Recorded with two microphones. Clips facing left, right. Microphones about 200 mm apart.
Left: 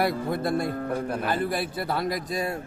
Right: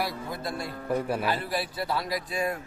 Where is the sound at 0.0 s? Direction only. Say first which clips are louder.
Left 7 dB; 55° left (ahead or behind).